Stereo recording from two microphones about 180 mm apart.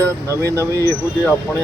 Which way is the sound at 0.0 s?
15° right (ahead or behind).